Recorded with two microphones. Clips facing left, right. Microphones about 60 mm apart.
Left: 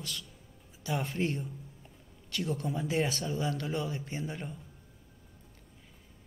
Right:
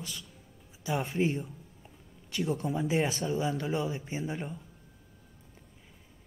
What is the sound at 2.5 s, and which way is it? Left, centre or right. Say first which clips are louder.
Speech: right 3 dB; centre.